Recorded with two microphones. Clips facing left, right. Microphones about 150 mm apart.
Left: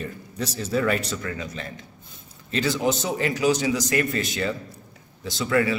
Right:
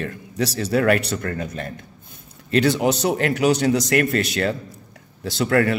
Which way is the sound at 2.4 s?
65° right (ahead or behind).